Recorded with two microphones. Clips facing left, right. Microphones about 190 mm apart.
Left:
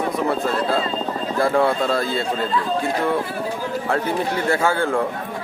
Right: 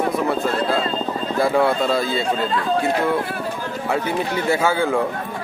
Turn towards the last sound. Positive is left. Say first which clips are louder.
# right 1 dB
turn(degrees=-5)  # may be behind; listen again after turning